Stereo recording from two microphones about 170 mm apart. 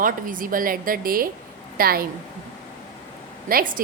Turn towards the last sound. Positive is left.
turn(degrees=-60)  # may be behind; listen again after turning